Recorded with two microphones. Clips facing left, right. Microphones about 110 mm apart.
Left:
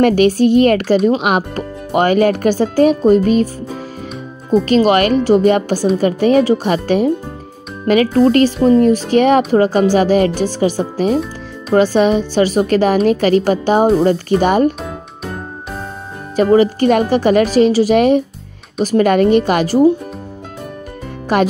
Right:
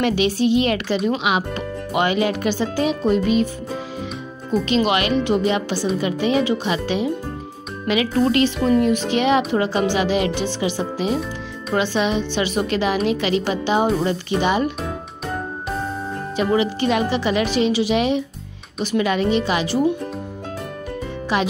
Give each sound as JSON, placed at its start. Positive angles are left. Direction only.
{"t": 0.0, "sound": "speech", "side_deg": 50}
{"t": 4.5, "sound": "speech", "side_deg": 45}
{"t": 16.3, "sound": "speech", "side_deg": 45}
{"t": 21.3, "sound": "speech", "side_deg": 50}